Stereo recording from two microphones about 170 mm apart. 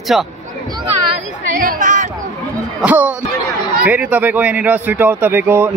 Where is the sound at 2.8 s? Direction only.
10° right (ahead or behind).